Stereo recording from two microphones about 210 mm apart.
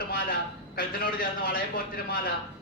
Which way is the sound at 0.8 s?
45° left (ahead or behind).